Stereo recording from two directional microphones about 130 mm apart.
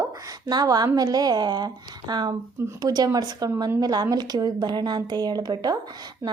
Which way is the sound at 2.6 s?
20° right (ahead or behind).